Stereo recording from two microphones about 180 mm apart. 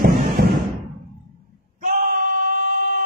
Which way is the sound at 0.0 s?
50° right (ahead or behind).